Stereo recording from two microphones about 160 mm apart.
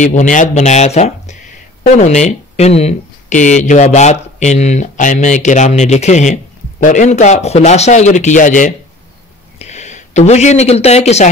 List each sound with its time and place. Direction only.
0.0 s speech: 50° left (ahead or behind)